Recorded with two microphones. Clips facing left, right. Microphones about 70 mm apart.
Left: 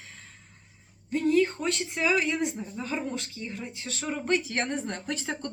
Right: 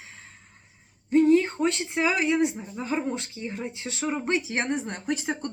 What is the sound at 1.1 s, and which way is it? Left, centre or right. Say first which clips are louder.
Speech: right 5 dB; right.